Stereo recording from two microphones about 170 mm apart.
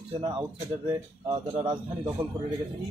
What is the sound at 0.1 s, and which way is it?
Speech, 30° right (ahead or behind).